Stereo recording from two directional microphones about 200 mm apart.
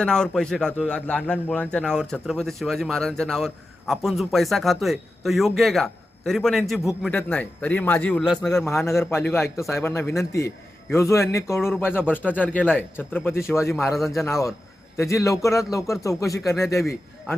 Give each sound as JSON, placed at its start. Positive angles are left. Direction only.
{"t": 0.0, "sound": "a man's voice", "side_deg": 5}
{"t": 13.8, "sound": "a man's voice", "side_deg": 0}
{"t": 14.3, "sound": "a man's voice", "side_deg": 15}